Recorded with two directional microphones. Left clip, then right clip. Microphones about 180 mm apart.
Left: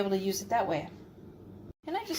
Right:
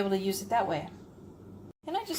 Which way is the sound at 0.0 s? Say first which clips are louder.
Even; 5° left (ahead or behind).